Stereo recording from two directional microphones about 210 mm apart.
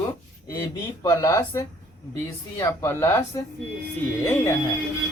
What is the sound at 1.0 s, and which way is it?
Speech, 15° left (ahead or behind).